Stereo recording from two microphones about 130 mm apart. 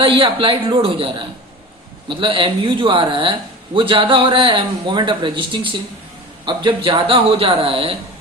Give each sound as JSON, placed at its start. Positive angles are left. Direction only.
{"t": 0.0, "sound": "a man's voice", "side_deg": -45}